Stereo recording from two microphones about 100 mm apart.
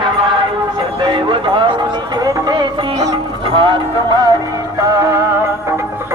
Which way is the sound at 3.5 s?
60° right (ahead or behind).